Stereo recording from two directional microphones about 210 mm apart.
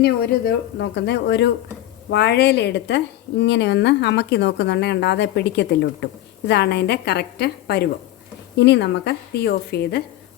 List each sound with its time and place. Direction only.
0.0 s a woman's voice: 50° left (ahead or behind)